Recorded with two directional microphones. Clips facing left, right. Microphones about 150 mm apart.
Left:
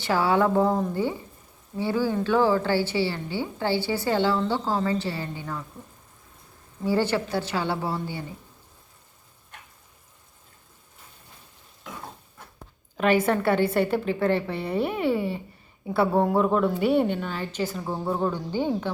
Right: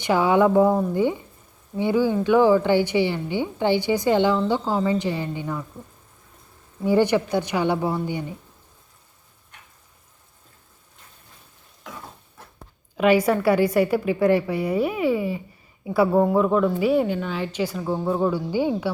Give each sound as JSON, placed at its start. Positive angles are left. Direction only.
{"t": 0.0, "sound": "a woman's voice", "side_deg": -15}
{"t": 6.8, "sound": "a woman's voice", "side_deg": -15}
{"t": 13.2, "sound": "a woman's voice", "side_deg": -5}